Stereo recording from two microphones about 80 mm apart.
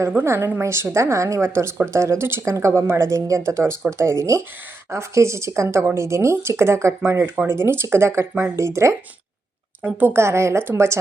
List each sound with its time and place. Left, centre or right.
0.2 s speech: right
9.8 s speech: right